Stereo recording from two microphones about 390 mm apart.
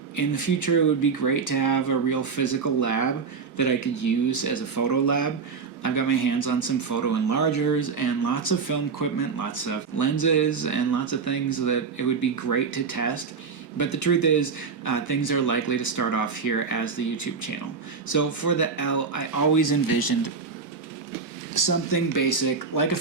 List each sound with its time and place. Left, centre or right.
0.2 s a man's voice: left
21.5 s a man's voice: left